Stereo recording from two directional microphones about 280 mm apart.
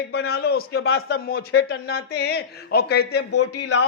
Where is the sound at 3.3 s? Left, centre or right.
Left.